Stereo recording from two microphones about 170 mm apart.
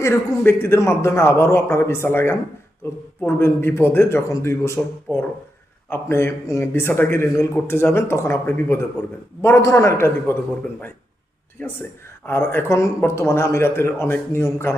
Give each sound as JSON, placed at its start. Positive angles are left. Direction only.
{"t": 0.0, "sound": "speech", "side_deg": 15}
{"t": 5.9, "sound": "speech", "side_deg": 15}
{"t": 11.6, "sound": "speech", "side_deg": 10}